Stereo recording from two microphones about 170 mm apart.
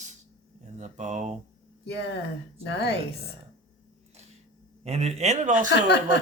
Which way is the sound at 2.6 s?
75° left (ahead or behind).